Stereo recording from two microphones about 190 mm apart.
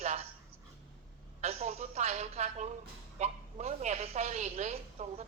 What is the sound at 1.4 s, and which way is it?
A woman's voice, 35° right (ahead or behind).